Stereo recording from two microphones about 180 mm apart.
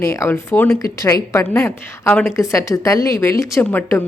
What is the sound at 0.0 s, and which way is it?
Speech, 15° left (ahead or behind).